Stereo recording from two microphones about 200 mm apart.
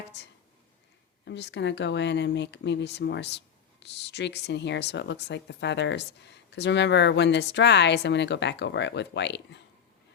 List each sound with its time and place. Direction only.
0.1 s speech: 60° left (ahead or behind)